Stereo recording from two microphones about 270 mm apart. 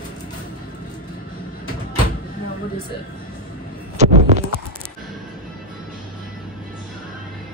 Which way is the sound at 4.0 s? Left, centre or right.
Right.